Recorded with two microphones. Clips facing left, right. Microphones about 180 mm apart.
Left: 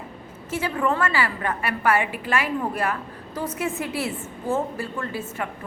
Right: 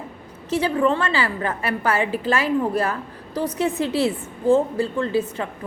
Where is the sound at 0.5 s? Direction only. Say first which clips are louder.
Right 5 dB; 35° right (ahead or behind).